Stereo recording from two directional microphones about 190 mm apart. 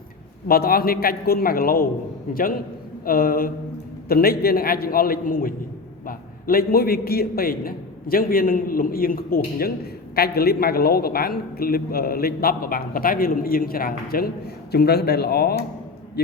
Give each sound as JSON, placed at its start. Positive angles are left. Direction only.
{"t": 0.4, "sound": "a woman's voice", "side_deg": 50}